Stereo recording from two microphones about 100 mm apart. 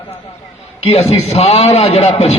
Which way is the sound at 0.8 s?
90° left.